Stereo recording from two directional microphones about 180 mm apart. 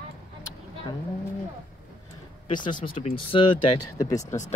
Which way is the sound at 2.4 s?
25° left (ahead or behind).